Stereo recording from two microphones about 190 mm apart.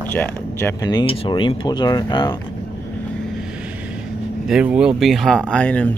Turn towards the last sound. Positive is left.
turn(degrees=5)  # may be behind; listen again after turning